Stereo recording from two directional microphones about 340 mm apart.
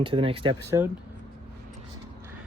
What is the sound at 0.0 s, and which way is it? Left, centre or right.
Speech, centre.